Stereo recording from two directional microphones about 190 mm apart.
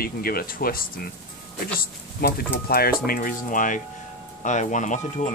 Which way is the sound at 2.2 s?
50° left (ahead or behind).